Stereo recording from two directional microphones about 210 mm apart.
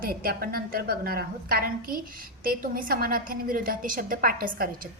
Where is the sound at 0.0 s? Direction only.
45° right (ahead or behind).